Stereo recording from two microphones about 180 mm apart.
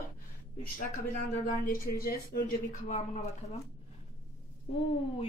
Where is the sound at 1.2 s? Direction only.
50° left (ahead or behind).